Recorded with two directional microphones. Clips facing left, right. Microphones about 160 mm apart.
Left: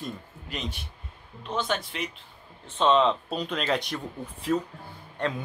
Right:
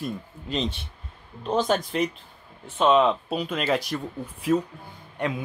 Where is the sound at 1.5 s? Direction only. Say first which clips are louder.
Right 6 dB; 40° right (ahead or behind).